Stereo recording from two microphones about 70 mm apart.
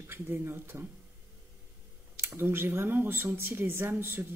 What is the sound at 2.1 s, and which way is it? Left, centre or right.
Speech, right.